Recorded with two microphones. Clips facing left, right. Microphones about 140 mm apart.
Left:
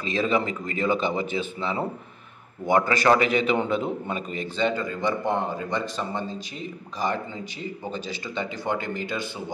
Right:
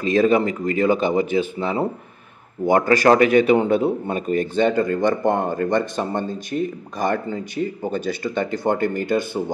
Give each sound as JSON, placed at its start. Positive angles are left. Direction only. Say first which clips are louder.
{"t": 0.0, "sound": "a man's voice", "louder": "right 8 dB", "side_deg": -45}